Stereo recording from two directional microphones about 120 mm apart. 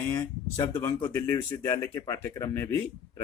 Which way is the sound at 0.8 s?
15° left (ahead or behind).